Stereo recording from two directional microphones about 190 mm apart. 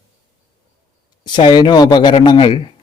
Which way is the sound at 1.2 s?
25° left (ahead or behind).